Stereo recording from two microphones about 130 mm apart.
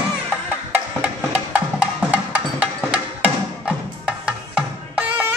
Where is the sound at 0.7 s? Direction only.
10° right (ahead or behind).